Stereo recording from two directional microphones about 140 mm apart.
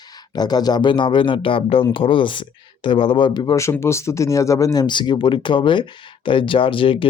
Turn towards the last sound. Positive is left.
turn(degrees=40)  # may be behind; listen again after turning